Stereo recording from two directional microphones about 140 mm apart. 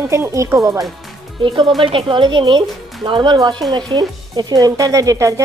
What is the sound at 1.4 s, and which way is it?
A woman's voice, 35° right (ahead or behind).